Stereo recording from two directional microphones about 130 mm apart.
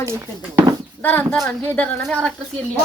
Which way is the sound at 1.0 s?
10° left (ahead or behind).